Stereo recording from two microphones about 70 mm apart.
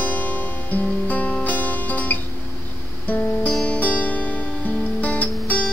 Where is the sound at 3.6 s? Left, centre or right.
Left.